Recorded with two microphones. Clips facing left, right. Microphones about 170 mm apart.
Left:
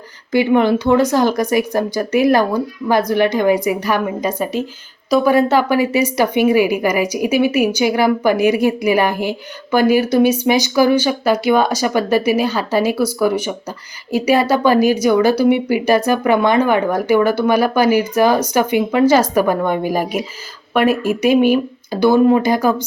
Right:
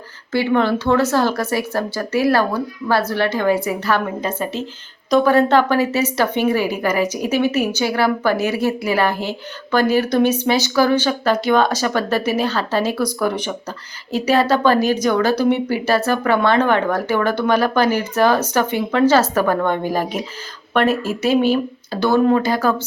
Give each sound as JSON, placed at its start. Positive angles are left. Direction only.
{"t": 0.3, "sound": "a woman's voice", "side_deg": 15}